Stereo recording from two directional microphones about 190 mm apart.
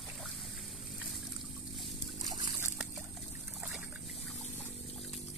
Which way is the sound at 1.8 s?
Centre (ahead or behind).